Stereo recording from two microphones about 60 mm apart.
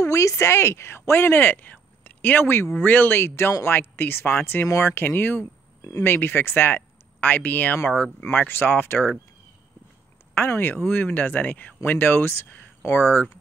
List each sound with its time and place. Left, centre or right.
0.0 s speech: left
4.6 s speech: left
4.9 s speech: left
5.8 s a sound: left
6.0 s speech: left
7.9 s speech: centre
8.3 s speech: left
10.5 s speech: left